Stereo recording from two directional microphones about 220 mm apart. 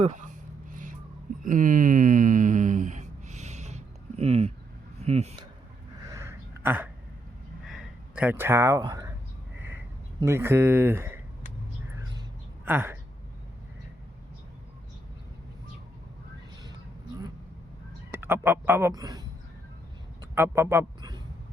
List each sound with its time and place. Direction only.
0.0 s a sound: 35° right (ahead or behind)
5.0 s speech: 30° right (ahead or behind)
6.1 s a sound: 15° right (ahead or behind)
10.2 s speech: 10° right (ahead or behind)
12.6 s speech: 10° right (ahead or behind)
18.1 s speech: 10° right (ahead or behind)
20.3 s speech: 10° right (ahead or behind)